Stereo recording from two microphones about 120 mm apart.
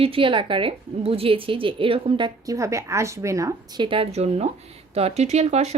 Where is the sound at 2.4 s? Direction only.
25° right (ahead or behind).